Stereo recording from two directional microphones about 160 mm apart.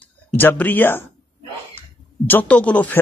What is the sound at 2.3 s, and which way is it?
Speech, 10° left (ahead or behind).